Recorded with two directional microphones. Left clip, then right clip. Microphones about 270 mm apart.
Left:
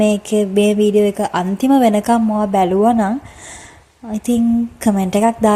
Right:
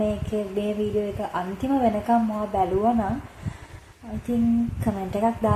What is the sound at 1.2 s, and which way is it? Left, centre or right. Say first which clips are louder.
A woman's voice: left 10 dB; left.